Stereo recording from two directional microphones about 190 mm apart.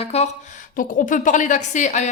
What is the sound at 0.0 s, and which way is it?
A woman's voice, 35° left (ahead or behind).